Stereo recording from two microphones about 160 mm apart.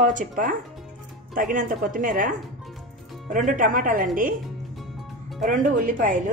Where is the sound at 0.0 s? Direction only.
55° right (ahead or behind).